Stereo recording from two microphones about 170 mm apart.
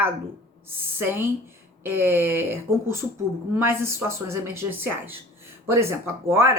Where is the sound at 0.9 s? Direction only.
15° right (ahead or behind).